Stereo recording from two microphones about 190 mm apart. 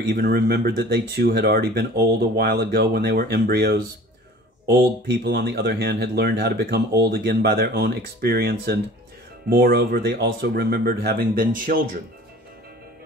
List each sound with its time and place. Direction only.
0.0 s speech: 55° right (ahead or behind)
5.2 s speech: 60° right (ahead or behind)